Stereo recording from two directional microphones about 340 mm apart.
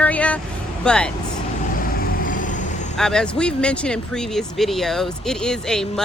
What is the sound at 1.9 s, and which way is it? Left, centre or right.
Vehicle, left.